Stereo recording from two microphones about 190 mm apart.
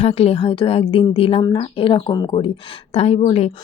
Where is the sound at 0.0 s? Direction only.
30° left (ahead or behind).